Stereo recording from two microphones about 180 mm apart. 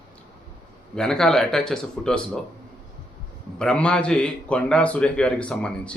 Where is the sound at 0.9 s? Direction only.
5° left (ahead or behind).